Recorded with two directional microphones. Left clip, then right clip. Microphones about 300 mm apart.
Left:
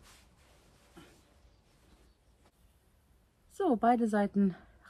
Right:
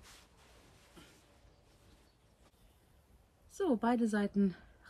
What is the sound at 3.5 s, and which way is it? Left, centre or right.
A woman's voice, centre.